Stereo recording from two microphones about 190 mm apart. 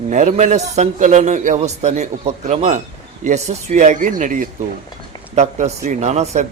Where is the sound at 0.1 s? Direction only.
40° right (ahead or behind).